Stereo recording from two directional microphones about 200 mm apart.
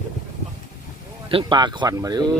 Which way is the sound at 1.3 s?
25° right (ahead or behind).